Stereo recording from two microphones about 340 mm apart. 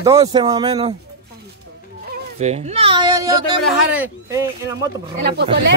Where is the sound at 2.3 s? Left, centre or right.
Centre.